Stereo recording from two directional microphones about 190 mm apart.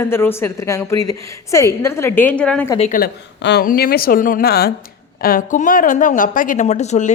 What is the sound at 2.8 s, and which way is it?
Speech, 45° left (ahead or behind).